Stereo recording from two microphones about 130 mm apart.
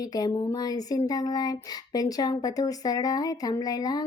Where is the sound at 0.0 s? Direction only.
30° left (ahead or behind).